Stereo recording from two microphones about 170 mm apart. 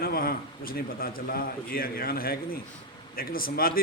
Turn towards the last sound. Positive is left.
turn(degrees=60)  # may be behind; listen again after turning